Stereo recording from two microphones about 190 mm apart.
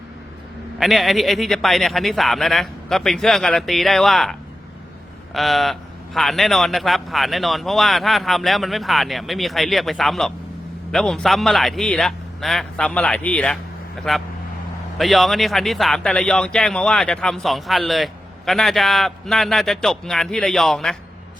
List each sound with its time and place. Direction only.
0.8 s speech: centre (ahead or behind)